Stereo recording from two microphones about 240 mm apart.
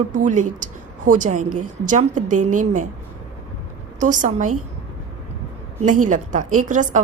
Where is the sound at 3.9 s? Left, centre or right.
Right.